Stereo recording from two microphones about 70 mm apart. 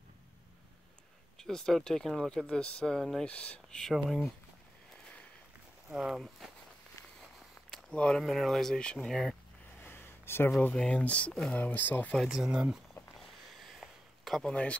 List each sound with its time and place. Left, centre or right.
1.4 s speech: centre
3.3 s speech: centre
5.9 s speech: centre
7.9 s speech: centre
8.2 s speech: centre
9.8 s a sound: left
10.7 s speech: centre
12.2 s speech: centre
13.2 s a sound: centre
14.5 s speech: centre